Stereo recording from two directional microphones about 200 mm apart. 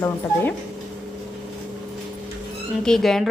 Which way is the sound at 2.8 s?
Centre (ahead or behind).